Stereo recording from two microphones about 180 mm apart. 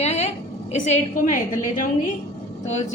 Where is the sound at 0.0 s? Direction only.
35° left (ahead or behind).